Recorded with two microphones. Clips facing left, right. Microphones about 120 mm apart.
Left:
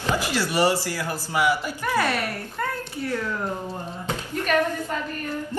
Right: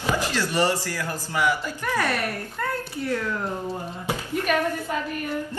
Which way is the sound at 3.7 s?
10° right (ahead or behind).